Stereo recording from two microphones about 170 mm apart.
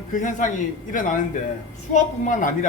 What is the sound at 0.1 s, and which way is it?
Speech, 50° left (ahead or behind).